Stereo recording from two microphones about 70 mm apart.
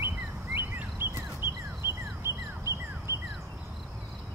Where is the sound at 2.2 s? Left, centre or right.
Right.